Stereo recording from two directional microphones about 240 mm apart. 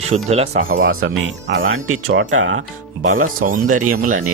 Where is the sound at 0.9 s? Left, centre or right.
Right.